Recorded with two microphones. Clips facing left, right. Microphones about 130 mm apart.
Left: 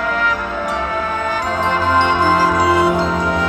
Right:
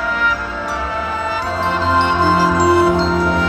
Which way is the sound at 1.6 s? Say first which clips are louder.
Even; 15° left (ahead or behind).